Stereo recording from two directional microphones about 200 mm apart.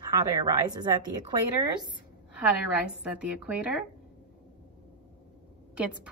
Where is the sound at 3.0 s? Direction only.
5° right (ahead or behind).